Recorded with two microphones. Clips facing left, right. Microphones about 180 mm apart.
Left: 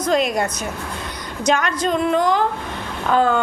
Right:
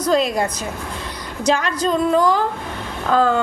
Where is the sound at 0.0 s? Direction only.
30° right (ahead or behind).